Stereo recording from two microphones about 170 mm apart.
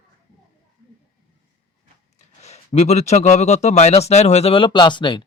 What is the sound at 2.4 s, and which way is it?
A man's voice, 40° left (ahead or behind).